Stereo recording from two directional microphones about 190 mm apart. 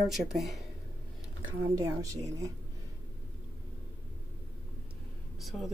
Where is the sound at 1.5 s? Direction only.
10° right (ahead or behind).